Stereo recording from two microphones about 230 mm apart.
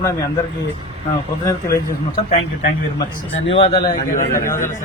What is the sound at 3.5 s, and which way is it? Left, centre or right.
Speech, left.